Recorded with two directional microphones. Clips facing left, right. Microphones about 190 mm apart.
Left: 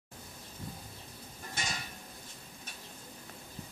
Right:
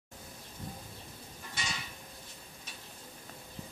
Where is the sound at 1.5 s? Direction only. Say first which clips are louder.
Left 1 dB; 45° left (ahead or behind).